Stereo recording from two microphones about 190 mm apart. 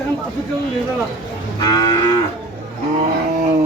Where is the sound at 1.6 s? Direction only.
20° left (ahead or behind).